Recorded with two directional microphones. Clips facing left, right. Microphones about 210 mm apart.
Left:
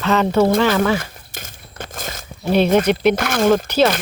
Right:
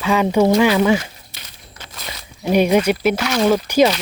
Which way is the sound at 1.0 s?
50° left (ahead or behind).